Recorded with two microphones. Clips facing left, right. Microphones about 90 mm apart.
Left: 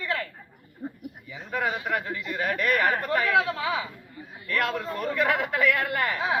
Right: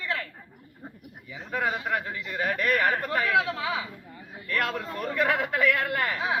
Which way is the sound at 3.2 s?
5° right (ahead or behind).